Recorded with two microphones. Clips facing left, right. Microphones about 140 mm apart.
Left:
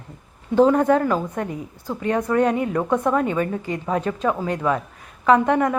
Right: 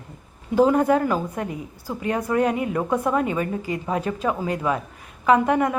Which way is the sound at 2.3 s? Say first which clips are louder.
Left 1 dB; 35° left (ahead or behind).